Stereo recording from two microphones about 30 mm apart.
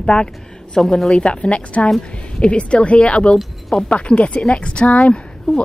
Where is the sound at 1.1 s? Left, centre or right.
Left.